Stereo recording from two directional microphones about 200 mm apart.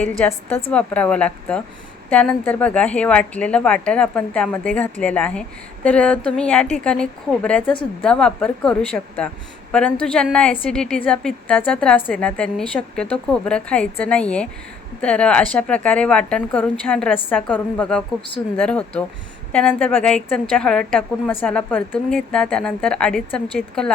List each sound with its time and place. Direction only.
0.3 s a woman's voice: 10° left (ahead or behind)